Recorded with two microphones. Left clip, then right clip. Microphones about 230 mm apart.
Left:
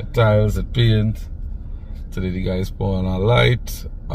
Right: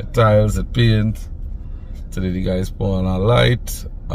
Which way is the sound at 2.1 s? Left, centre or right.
Centre.